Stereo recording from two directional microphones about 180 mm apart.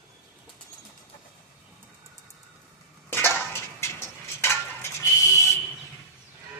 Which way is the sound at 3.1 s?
10° left (ahead or behind).